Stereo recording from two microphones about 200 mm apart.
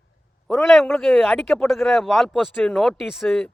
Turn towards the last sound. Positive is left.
turn(degrees=5)  # may be behind; listen again after turning